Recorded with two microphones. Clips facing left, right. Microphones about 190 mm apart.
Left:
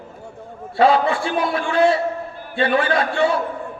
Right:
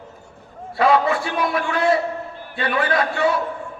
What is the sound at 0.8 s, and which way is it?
A man's voice, 30° left (ahead or behind).